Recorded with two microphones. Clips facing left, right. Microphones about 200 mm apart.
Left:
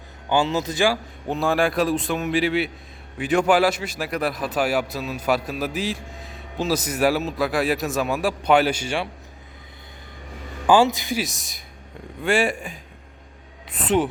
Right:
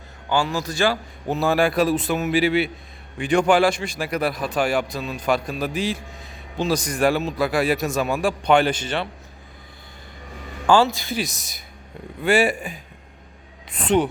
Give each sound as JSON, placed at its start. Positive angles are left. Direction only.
{"t": 0.3, "sound": "a man's voice", "side_deg": 20}
{"t": 1.3, "sound": "a man's voice", "side_deg": -5}
{"t": 10.7, "sound": "a man's voice", "side_deg": 15}
{"t": 11.2, "sound": "a man's voice", "side_deg": 0}
{"t": 13.7, "sound": "a sound", "side_deg": 0}